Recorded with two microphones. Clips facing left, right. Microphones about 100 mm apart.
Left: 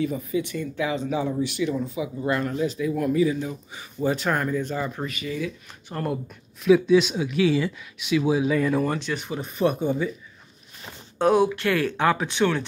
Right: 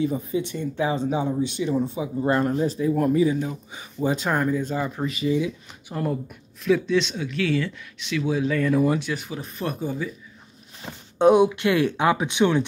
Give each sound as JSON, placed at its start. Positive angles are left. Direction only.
{"t": 0.0, "sound": "speech", "side_deg": -30}
{"t": 5.9, "sound": "speech", "side_deg": -10}
{"t": 8.7, "sound": "speech", "side_deg": -5}
{"t": 11.1, "sound": "speech", "side_deg": -20}